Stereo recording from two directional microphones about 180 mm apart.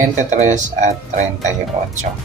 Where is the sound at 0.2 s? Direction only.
40° right (ahead or behind).